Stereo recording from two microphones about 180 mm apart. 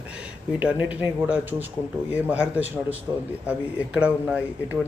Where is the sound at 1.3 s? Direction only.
10° right (ahead or behind).